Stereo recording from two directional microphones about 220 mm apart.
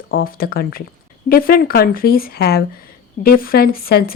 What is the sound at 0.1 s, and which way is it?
Speech, 40° left (ahead or behind).